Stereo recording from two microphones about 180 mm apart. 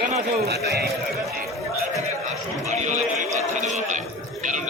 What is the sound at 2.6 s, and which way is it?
Run, 40° right (ahead or behind).